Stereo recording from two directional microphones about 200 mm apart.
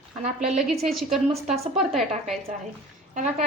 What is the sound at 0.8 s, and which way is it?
A woman's voice, centre (ahead or behind).